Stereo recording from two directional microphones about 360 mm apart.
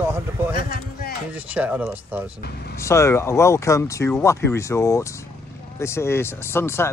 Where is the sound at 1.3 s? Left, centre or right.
Centre.